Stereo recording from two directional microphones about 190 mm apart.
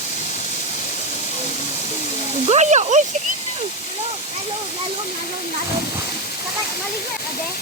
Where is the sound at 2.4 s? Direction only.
35° right (ahead or behind).